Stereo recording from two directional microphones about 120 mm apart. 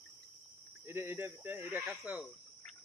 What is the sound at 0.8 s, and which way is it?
Speech, 20° right (ahead or behind).